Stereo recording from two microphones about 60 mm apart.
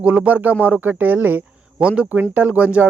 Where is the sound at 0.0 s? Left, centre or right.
Centre.